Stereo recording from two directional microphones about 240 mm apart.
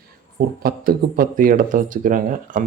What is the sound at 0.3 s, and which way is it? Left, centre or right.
Speech, right.